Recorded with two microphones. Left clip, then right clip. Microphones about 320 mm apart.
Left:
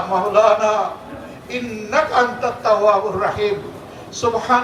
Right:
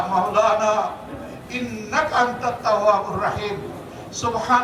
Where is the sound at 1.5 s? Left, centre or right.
Centre.